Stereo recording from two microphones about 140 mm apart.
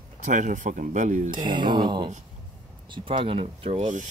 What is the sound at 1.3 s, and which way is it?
Speech, 35° right (ahead or behind).